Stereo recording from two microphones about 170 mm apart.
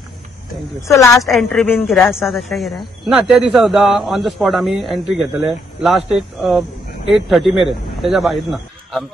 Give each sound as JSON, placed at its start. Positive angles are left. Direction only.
{"t": 0.8, "sound": "a woman's voice", "side_deg": 20}
{"t": 1.1, "sound": "a man's voice", "side_deg": 0}